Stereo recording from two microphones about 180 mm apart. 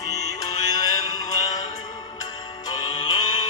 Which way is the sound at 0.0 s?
20° left (ahead or behind).